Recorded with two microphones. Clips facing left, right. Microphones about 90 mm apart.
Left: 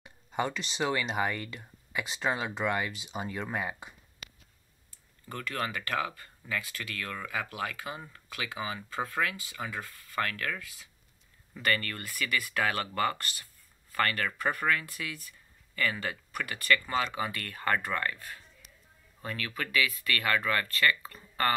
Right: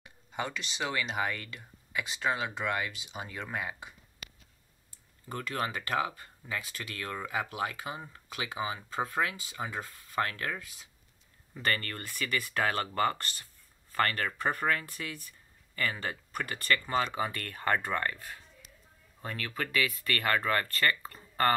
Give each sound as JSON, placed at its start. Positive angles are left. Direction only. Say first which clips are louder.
{"t": 0.0, "sound": "a sound", "louder": "left 4 dB", "side_deg": 25}
{"t": 1.0, "sound": "speech", "louder": "left 2 dB", "side_deg": 20}
{"t": 5.3, "sound": "speech", "louder": "even", "side_deg": -20}